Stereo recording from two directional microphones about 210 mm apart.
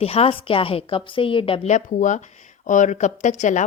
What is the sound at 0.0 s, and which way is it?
A woman's voice, 30° left (ahead or behind).